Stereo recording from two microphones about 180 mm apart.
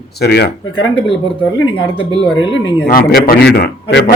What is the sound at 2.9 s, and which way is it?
A man's voice, 50° left (ahead or behind).